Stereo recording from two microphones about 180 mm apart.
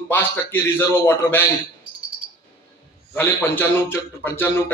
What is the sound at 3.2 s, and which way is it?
A man's voice, 10° left (ahead or behind).